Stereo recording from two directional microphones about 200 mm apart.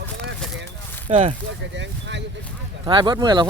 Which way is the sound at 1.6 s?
65° right (ahead or behind).